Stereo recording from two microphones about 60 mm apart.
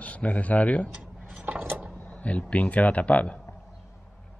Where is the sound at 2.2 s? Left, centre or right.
Left.